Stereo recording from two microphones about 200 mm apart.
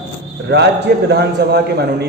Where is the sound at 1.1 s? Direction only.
55° right (ahead or behind).